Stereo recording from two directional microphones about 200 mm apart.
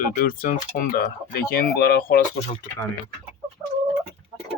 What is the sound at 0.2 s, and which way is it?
Speech, 45° left (ahead or behind).